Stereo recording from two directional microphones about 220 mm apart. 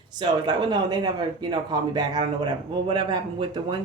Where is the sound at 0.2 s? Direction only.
20° right (ahead or behind).